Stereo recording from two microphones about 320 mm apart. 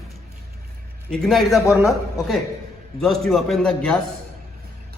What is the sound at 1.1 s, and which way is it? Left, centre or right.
A man's voice, centre.